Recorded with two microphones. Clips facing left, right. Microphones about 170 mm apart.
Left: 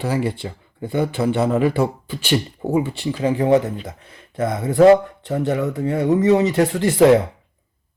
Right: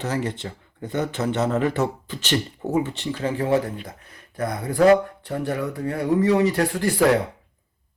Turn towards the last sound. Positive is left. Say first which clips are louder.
# left 6 dB
turn(degrees=20)  # may be behind; listen again after turning